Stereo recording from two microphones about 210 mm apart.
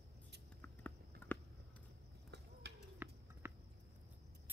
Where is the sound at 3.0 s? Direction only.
10° right (ahead or behind).